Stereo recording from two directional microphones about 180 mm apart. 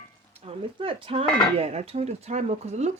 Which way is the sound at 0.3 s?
30° right (ahead or behind).